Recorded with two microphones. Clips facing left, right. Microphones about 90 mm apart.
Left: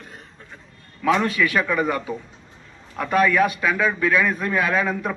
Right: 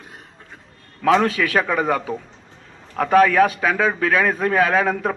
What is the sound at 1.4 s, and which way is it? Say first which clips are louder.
A man's voice: right 1 dB; 40° right (ahead or behind).